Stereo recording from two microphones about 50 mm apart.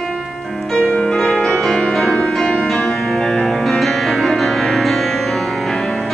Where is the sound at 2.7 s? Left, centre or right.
Centre.